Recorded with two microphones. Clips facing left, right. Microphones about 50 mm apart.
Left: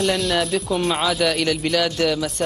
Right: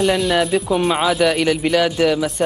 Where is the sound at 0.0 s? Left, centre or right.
Centre.